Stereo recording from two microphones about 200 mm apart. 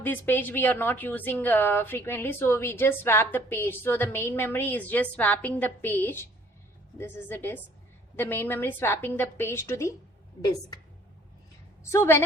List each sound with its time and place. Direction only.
0.0 s a woman's voice: 10° left (ahead or behind)
11.8 s a woman's voice: 15° left (ahead or behind)